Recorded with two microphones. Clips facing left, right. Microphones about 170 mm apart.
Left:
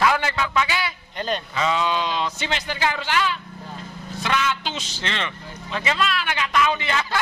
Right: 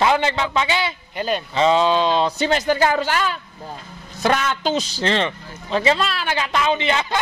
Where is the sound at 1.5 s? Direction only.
30° right (ahead or behind).